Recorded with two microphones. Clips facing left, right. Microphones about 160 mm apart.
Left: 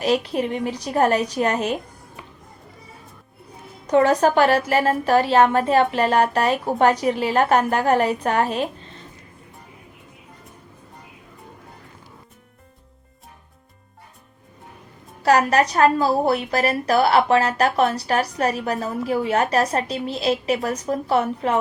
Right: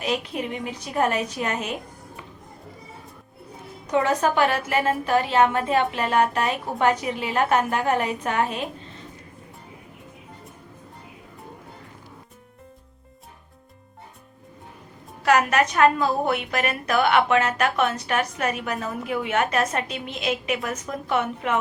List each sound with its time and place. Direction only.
0.0 s a woman's voice: 35° left (ahead or behind)
3.9 s a woman's voice: 35° left (ahead or behind)
15.2 s a woman's voice: 35° left (ahead or behind)